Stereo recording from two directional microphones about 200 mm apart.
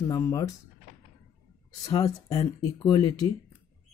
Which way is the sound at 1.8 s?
15° left (ahead or behind).